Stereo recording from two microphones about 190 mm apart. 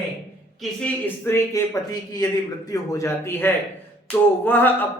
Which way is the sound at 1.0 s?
10° left (ahead or behind).